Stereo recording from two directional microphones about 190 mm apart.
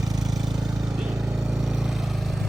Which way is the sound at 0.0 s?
Centre (ahead or behind).